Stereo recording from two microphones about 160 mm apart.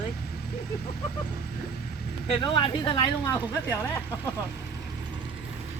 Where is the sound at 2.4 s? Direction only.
30° left (ahead or behind).